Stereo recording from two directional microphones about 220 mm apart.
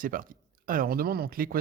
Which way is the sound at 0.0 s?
40° right (ahead or behind).